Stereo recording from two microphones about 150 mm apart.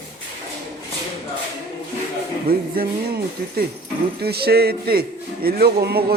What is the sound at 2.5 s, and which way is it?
A man's voice, 80° right.